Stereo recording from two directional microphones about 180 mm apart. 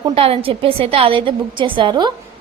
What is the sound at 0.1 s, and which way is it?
A woman's voice, 30° right (ahead or behind).